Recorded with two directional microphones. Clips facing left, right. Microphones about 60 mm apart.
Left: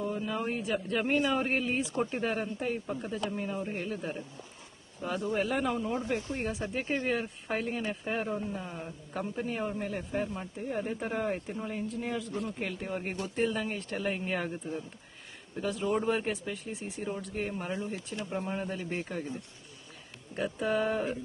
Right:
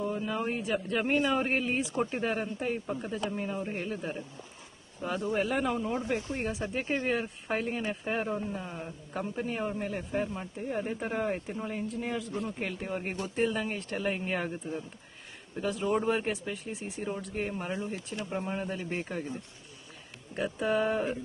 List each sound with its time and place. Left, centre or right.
0.1 s speech: centre
20.3 s speech: centre